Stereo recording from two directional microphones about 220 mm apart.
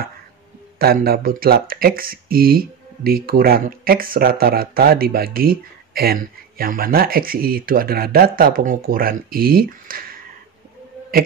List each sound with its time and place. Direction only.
0.7 s speech: 45° right (ahead or behind)